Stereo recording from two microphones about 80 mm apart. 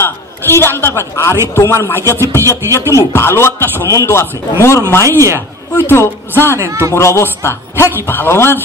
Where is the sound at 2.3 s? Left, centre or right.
Left.